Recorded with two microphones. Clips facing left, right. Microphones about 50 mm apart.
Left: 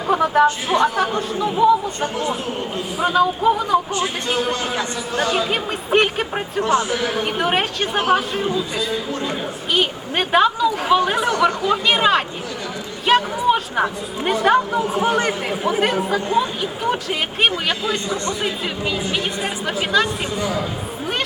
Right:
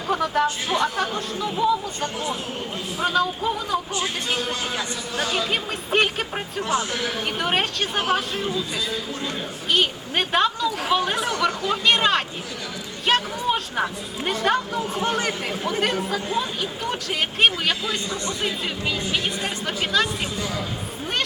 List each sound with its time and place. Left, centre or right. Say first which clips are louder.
0.1 s music: left 6 dB; centre
0.7 s speech: left 5 dB; centre
9.7 s speech: left 2 dB; centre
13.1 s a sound: left 6 dB; centre
14.4 s speech: left 6 dB; centre
20.4 s a man's voice: left 6 dB; centre